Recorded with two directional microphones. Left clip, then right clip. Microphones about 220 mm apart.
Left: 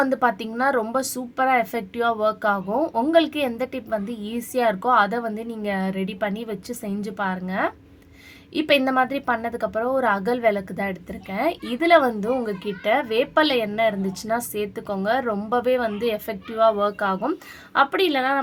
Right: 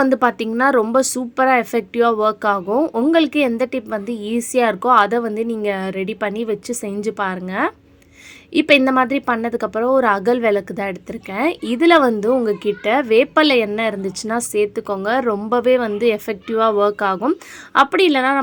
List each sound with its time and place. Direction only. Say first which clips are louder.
0.0 s a woman's voice: right 5 dB; 35° right (ahead or behind)